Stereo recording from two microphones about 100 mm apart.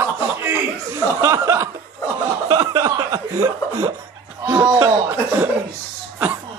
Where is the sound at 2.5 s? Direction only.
35° right (ahead or behind).